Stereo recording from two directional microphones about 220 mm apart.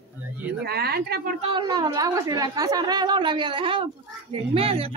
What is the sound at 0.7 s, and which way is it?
Speech, 45° right (ahead or behind).